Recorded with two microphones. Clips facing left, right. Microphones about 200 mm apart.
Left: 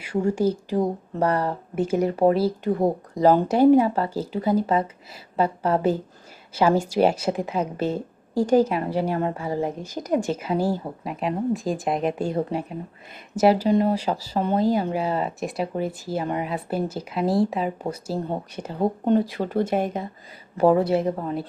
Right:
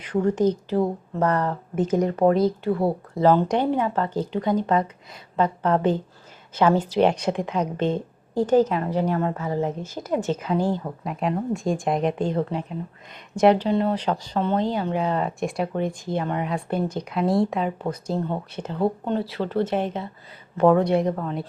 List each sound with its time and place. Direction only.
0.0 s speech: 10° left (ahead or behind)
2.0 s speech: 30° left (ahead or behind)
2.8 s speech: 15° left (ahead or behind)
9.1 s speech: 25° left (ahead or behind)
9.4 s a woman's voice: 10° left (ahead or behind)